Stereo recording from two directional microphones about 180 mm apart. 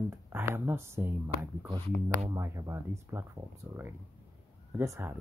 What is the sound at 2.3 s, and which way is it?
Speech, 15° right (ahead or behind).